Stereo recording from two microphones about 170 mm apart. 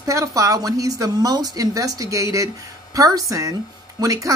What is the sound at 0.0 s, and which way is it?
Speech, 20° right (ahead or behind).